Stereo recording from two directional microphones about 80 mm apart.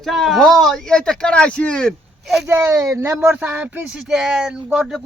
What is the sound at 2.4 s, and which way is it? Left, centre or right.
Speech, right.